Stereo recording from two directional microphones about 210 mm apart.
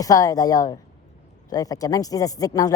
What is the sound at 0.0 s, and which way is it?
Speech, 15° left (ahead or behind).